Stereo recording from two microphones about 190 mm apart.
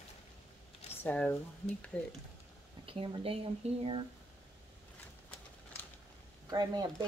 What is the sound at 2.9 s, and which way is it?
Speech, 30° right (ahead or behind).